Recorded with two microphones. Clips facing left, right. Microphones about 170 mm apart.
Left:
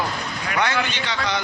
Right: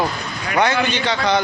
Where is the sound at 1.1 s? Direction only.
35° right (ahead or behind).